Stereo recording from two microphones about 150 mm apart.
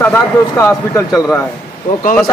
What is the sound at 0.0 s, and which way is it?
Speech, 15° left (ahead or behind).